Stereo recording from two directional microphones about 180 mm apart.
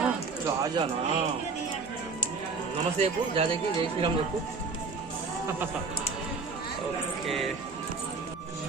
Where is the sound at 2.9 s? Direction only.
35° right (ahead or behind).